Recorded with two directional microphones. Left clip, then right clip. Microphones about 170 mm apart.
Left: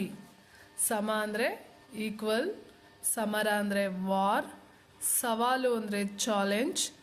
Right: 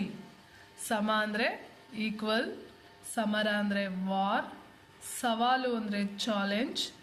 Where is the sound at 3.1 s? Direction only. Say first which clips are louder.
Left 1 dB; 45° left (ahead or behind).